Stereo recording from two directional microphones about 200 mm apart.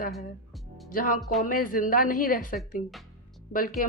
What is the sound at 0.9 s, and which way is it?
A woman's voice, 45° left (ahead or behind).